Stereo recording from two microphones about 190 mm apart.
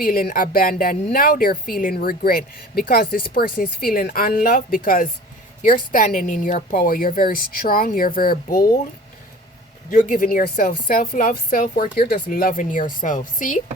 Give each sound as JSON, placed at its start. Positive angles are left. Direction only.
{"t": 0.0, "sound": "speech", "side_deg": 50}
{"t": 9.9, "sound": "speech", "side_deg": 45}